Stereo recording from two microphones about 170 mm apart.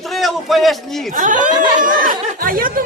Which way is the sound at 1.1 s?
50° right (ahead or behind).